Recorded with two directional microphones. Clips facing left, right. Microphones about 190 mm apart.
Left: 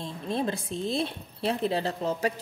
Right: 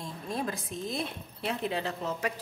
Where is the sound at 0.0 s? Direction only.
30° left (ahead or behind).